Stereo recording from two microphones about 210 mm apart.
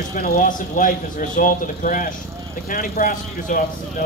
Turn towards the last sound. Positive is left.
turn(degrees=40)  # may be behind; listen again after turning